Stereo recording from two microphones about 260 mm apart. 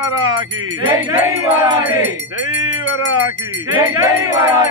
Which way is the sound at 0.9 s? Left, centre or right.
Centre.